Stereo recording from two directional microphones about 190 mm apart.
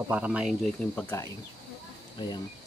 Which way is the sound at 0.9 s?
15° left (ahead or behind).